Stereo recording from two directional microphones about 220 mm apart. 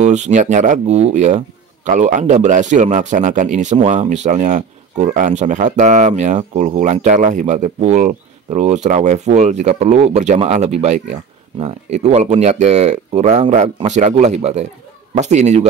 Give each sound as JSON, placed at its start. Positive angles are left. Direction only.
{"t": 0.0, "sound": "speech", "side_deg": -30}